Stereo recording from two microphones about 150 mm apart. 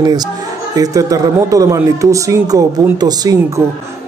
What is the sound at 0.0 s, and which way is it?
A man's voice, 25° right (ahead or behind).